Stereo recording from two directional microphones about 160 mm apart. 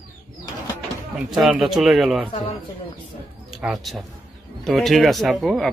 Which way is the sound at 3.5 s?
Centre (ahead or behind).